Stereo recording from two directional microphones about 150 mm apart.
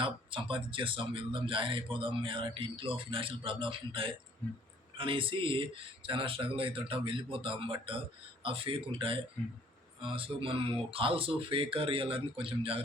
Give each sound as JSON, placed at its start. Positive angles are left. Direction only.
{"t": 0.0, "sound": "a man's voice", "side_deg": -35}